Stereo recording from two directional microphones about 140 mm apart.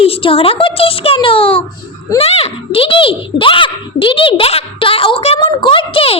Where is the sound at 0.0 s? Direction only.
40° left (ahead or behind).